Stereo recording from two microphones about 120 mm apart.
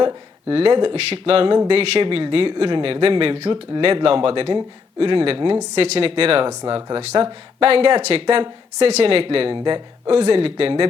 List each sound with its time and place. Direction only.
0.0 s speech: 45° right (ahead or behind)
7.6 s speech: 50° right (ahead or behind)
10.2 s speech: 55° right (ahead or behind)